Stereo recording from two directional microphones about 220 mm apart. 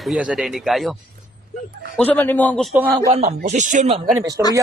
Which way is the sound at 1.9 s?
10° left (ahead or behind).